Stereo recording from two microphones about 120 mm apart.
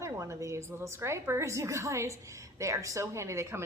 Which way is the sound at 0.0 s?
25° right (ahead or behind).